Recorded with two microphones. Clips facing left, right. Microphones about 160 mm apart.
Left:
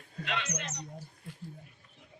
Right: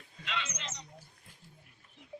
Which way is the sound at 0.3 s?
55° left (ahead or behind).